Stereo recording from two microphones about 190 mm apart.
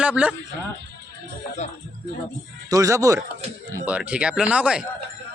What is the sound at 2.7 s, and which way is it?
Speech, 15° right (ahead or behind).